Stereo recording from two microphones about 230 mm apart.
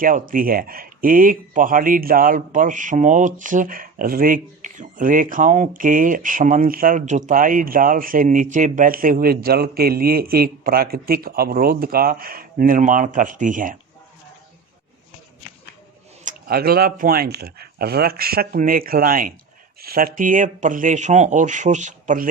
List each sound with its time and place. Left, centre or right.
0.0 s speech: right
16.2 s speech: right